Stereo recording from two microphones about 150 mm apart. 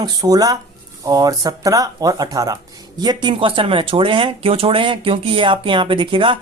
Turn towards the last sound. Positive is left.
turn(degrees=-35)  # may be behind; listen again after turning